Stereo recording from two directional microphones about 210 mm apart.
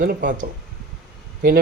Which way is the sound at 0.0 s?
45° right (ahead or behind).